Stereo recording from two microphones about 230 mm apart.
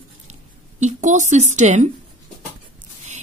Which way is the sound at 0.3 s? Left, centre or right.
Right.